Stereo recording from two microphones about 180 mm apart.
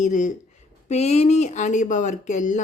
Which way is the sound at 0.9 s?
35° left (ahead or behind).